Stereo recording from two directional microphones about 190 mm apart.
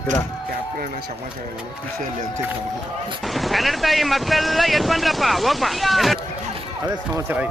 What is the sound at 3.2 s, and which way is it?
Speech, centre (ahead or behind).